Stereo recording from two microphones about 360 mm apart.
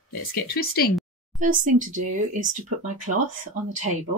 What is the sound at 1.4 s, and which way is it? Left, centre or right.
Speech, right.